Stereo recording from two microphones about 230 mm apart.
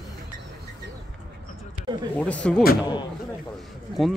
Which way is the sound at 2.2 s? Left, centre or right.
Centre.